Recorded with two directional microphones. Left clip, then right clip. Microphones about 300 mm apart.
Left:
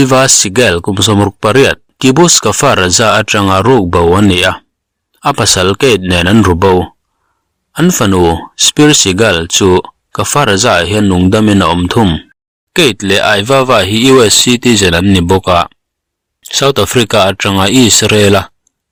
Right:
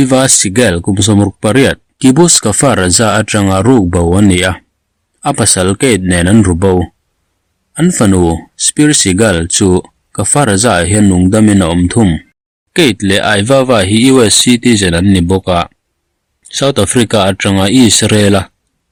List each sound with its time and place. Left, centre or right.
0.0 s speech: centre